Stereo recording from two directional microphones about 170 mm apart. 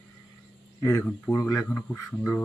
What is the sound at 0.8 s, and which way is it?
Speech, 10° left (ahead or behind).